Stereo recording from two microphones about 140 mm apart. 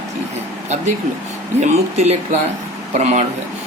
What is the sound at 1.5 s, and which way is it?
Speech, 55° right (ahead or behind).